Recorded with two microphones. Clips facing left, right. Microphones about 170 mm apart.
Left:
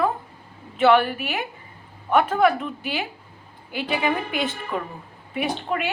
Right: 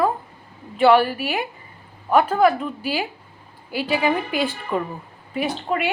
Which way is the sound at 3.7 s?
5° right (ahead or behind).